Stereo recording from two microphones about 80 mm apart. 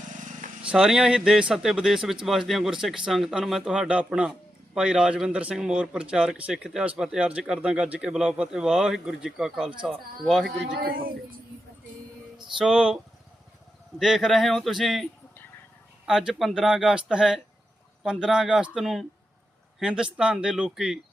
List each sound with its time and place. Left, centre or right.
0.7 s a man's voice: centre
12.5 s a man's voice: centre
14.0 s speech: centre
16.0 s a man's voice: centre